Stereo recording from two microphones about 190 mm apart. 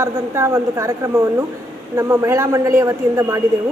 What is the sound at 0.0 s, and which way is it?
A woman's voice, 15° right (ahead or behind).